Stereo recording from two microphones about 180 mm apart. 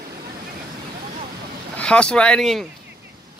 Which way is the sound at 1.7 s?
5° left (ahead or behind).